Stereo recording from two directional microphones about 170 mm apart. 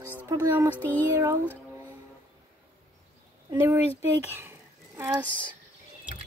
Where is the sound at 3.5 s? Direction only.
15° right (ahead or behind).